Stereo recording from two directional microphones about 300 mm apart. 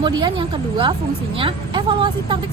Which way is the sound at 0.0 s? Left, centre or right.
Centre.